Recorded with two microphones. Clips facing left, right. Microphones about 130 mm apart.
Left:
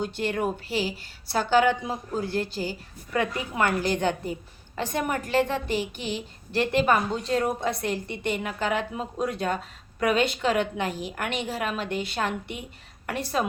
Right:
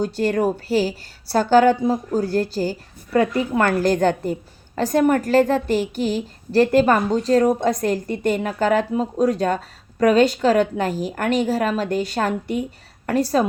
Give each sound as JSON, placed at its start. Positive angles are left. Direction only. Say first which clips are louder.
{"t": 0.0, "sound": "a woman's voice", "louder": "right 7 dB", "side_deg": -40}